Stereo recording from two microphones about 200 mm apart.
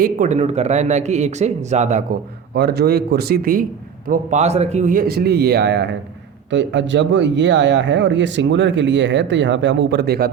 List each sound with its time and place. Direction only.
0.0 s a man's voice: 40° right (ahead or behind)
2.6 s a man's voice: 55° right (ahead or behind)